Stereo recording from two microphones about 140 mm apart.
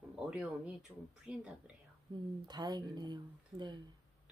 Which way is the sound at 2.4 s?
30° right (ahead or behind).